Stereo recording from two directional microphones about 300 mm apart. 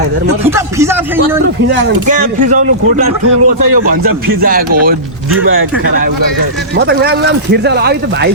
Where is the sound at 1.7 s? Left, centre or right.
Right.